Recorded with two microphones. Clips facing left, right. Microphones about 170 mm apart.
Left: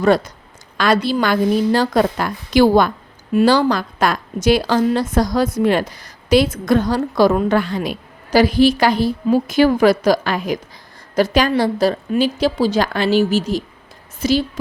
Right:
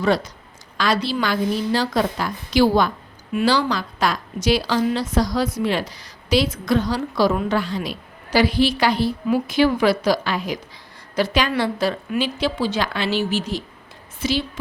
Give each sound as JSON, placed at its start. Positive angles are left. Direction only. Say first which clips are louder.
{"t": 0.0, "sound": "a woman's voice", "louder": "left 5 dB", "side_deg": 50}